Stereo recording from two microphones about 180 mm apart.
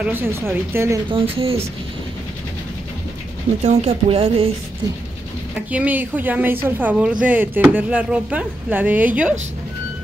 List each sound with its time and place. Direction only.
0.0 s speech: 10° right (ahead or behind)
1.1 s speech: 30° right (ahead or behind)
3.6 s speech: 35° right (ahead or behind)
5.7 s speech: 10° right (ahead or behind)